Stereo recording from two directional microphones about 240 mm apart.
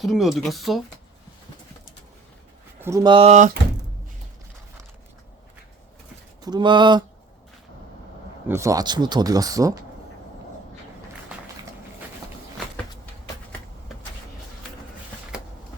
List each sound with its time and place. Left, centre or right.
0.0 s speech: centre
2.8 s speech: centre
6.4 s speech: centre
8.4 s speech: centre